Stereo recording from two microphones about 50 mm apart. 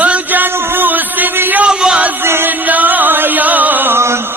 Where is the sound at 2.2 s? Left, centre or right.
Right.